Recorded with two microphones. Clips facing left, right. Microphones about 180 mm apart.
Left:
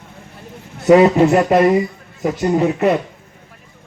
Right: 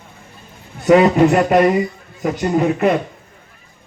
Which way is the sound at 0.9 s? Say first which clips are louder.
Left 1 dB; 30° left (ahead or behind).